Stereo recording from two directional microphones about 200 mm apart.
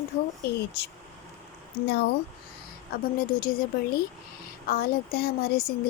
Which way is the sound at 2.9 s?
45° left (ahead or behind).